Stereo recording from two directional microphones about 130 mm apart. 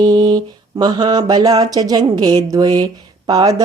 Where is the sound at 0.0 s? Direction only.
30° right (ahead or behind).